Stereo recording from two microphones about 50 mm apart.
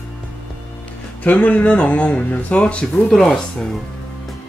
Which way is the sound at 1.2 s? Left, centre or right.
Left.